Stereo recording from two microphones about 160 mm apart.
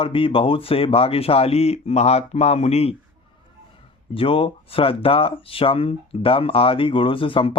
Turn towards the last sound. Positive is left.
turn(degrees=35)  # may be behind; listen again after turning